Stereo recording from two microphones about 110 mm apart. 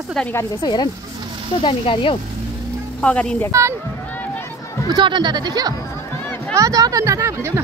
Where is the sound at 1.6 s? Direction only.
50° left (ahead or behind).